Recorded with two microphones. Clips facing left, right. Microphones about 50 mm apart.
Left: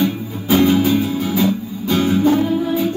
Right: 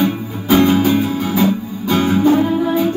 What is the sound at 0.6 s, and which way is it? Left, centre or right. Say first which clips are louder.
Music: right 1 dB; right.